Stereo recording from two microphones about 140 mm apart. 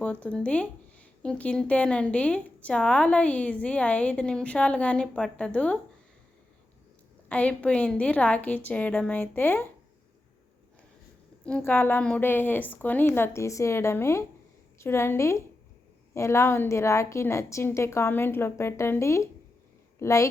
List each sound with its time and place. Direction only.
0.0 s speech: 10° left (ahead or behind)
7.3 s speech: 10° left (ahead or behind)
11.4 s a woman's voice: 10° left (ahead or behind)